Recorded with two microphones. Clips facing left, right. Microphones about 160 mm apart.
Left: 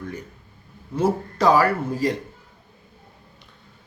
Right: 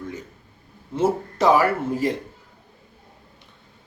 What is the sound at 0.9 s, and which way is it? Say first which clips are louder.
Speech: even; 25° right (ahead or behind).